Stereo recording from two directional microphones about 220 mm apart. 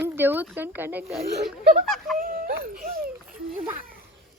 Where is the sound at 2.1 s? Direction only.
40° right (ahead or behind).